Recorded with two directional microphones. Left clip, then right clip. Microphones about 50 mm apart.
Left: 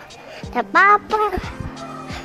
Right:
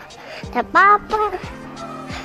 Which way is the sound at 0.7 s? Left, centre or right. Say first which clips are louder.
Even; left.